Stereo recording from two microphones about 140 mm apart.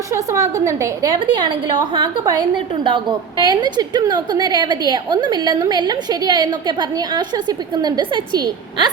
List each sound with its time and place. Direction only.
0.1 s a woman's voice: 25° right (ahead or behind)